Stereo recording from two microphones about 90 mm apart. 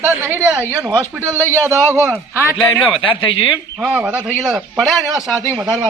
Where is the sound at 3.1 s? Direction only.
70° left (ahead or behind).